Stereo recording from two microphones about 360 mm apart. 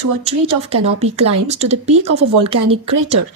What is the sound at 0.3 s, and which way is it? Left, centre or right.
Speech, centre.